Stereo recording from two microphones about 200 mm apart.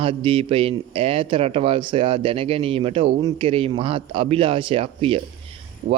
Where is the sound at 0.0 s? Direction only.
25° right (ahead or behind).